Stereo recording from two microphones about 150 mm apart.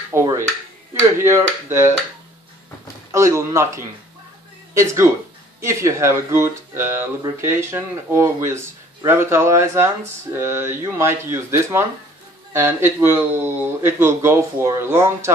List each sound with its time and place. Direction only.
0.1 s speech: 20° right (ahead or behind)
3.1 s speech: 20° right (ahead or behind)
5.6 s speech: 20° right (ahead or behind)